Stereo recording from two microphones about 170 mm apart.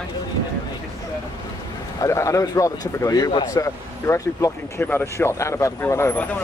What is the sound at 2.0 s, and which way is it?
Speech, 20° left (ahead or behind).